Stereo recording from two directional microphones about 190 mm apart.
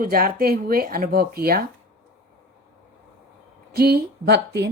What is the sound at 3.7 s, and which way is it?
A woman's voice, 55° right (ahead or behind).